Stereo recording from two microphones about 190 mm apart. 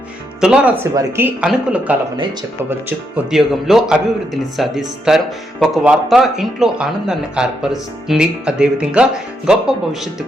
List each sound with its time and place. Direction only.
0.4 s speech: 5° right (ahead or behind)
3.2 s speech: centre (ahead or behind)